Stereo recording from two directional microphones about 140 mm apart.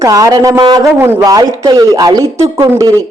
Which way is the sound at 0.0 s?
25° right (ahead or behind).